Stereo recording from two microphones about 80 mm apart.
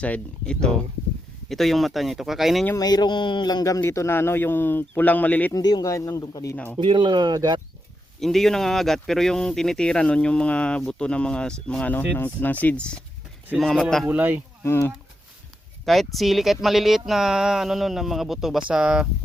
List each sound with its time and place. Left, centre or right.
0.0 s speech: centre
2.7 s speech: left
3.8 s speech: left
5.5 s speech: left
5.8 s speech: left
6.7 s speech: right
8.2 s speech: centre
14.1 s speech: right
14.6 s speech: left
16.1 s speech: centre